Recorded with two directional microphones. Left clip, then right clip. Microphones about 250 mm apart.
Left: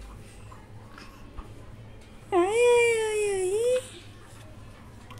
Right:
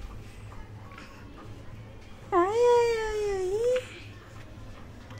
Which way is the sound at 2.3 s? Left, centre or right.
Centre.